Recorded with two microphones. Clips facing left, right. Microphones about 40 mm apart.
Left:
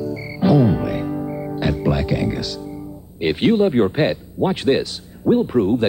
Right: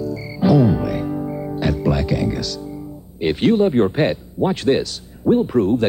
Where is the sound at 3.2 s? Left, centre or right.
Centre.